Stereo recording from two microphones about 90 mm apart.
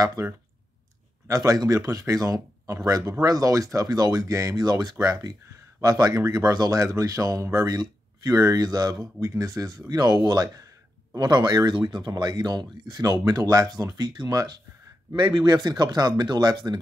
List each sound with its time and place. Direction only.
0.0 s speech: 40° right (ahead or behind)